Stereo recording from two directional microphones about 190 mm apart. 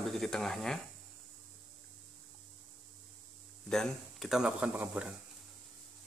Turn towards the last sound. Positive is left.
turn(degrees=-5)  # may be behind; listen again after turning